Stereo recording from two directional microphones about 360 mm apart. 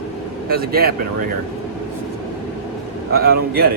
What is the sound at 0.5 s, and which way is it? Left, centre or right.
Speech, right.